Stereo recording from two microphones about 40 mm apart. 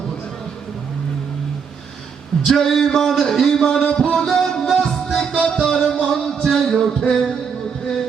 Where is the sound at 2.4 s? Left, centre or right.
Centre.